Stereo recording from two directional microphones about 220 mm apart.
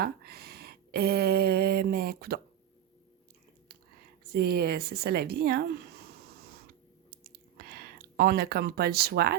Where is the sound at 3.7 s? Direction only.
45° right (ahead or behind).